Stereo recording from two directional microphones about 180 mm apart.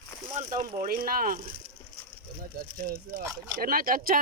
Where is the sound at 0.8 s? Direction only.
55° right (ahead or behind).